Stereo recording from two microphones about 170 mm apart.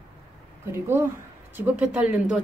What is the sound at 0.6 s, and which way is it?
Speech, 15° right (ahead or behind).